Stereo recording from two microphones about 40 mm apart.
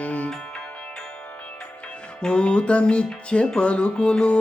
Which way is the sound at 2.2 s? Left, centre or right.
Left.